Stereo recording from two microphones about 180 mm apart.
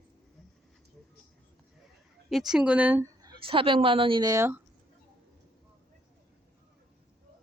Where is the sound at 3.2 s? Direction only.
30° right (ahead or behind).